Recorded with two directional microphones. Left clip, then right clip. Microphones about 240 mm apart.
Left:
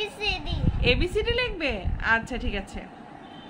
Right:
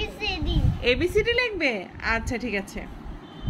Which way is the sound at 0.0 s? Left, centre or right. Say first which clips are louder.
Left 1 dB; left.